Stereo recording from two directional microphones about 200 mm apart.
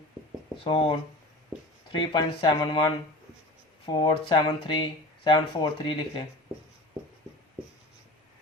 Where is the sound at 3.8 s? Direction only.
25° left (ahead or behind).